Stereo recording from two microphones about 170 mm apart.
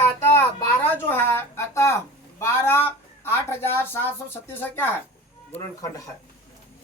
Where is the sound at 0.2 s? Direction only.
15° left (ahead or behind).